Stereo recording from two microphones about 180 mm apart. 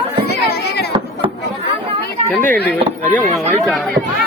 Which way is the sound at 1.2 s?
30° right (ahead or behind).